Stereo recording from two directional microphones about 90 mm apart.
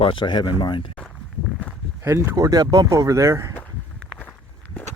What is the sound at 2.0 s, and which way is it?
Speech, 35° right (ahead or behind).